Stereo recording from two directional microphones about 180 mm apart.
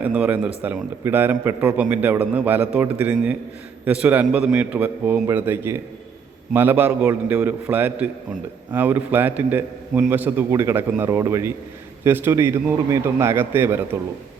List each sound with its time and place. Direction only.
0.0 s a man's voice: 10° right (ahead or behind)